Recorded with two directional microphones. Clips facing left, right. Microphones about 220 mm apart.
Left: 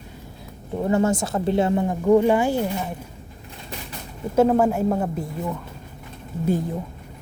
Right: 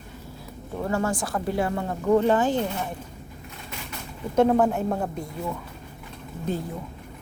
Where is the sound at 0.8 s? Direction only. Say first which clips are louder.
Left 6 dB; 20° left (ahead or behind).